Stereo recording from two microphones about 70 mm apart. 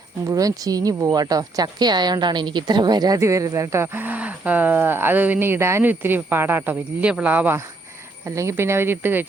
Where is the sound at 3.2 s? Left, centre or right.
Right.